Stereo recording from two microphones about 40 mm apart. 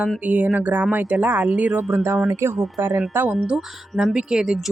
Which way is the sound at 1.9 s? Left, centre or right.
Right.